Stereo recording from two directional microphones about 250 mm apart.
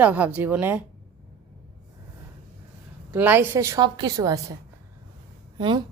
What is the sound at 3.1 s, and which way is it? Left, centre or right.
A woman's voice, centre.